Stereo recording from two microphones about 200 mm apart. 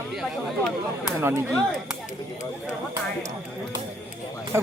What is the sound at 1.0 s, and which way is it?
Speech, 10° right (ahead or behind).